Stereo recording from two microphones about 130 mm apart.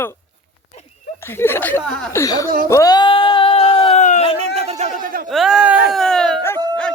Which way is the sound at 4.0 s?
70° left (ahead or behind).